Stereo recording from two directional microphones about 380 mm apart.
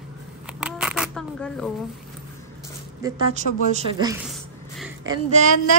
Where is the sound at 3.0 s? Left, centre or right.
Centre.